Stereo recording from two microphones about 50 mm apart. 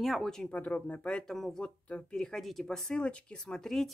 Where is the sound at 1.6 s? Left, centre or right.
Left.